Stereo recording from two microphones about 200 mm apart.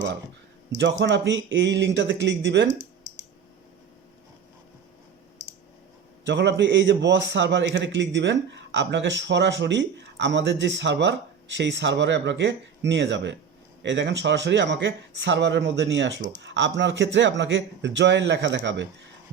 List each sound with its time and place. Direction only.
0.8 s a man's voice: 65° right (ahead or behind)
6.2 s a man's voice: 60° right (ahead or behind)